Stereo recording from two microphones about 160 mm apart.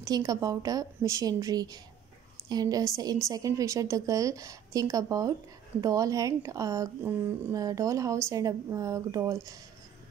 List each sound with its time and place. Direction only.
0.0 s a woman's voice: 20° right (ahead or behind)